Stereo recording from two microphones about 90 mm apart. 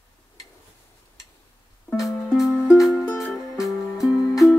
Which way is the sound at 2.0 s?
Centre (ahead or behind).